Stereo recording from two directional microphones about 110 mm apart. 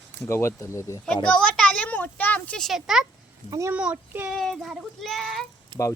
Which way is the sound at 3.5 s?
30° right (ahead or behind).